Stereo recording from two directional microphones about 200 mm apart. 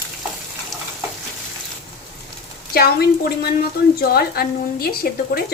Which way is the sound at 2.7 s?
50° left (ahead or behind).